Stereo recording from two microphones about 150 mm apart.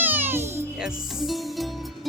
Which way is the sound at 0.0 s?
15° right (ahead or behind).